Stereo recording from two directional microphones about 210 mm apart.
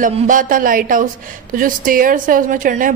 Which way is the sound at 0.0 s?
40° right (ahead or behind).